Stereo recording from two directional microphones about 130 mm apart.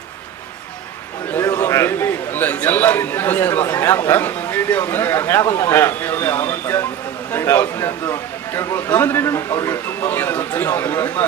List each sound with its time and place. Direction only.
1.3 s a man's voice: 25° left (ahead or behind)